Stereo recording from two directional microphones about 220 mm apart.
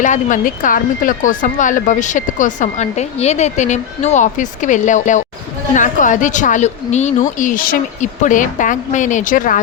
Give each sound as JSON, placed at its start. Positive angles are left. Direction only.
{"t": 0.0, "sound": "speech", "side_deg": 35}